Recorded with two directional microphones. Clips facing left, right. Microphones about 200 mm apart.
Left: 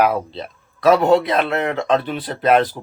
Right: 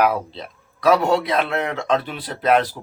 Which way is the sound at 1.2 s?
Centre (ahead or behind).